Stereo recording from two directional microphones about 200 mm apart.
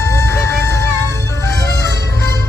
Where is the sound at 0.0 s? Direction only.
15° left (ahead or behind).